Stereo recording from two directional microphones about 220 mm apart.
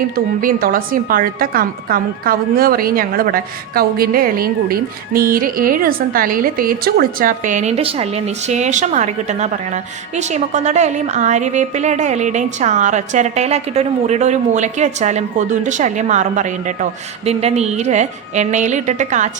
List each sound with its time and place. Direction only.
0.4 s a woman's voice: 40° right (ahead or behind)